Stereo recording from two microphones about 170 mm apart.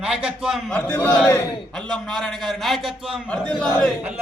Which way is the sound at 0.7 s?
10° left (ahead or behind).